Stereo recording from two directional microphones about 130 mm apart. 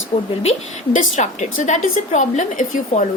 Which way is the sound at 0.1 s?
50° left (ahead or behind).